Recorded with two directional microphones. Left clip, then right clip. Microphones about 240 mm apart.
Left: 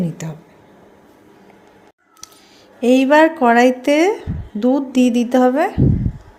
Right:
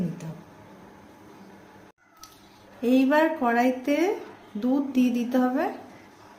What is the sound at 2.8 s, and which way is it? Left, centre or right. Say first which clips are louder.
Speech: left 10 dB; left.